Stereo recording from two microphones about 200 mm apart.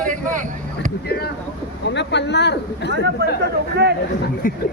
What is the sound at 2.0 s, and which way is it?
Speech, 60° left (ahead or behind).